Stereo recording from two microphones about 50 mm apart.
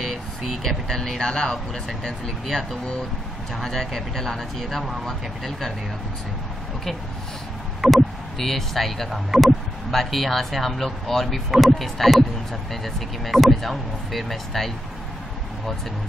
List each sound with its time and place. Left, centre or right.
0.0 s speech: centre
2.4 s speech: centre
7.8 s speech: centre
8.4 s speech: centre